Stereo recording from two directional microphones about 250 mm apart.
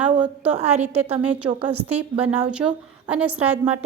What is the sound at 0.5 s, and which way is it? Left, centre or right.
Speech, right.